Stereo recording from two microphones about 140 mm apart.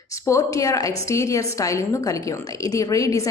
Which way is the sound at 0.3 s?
20° left (ahead or behind).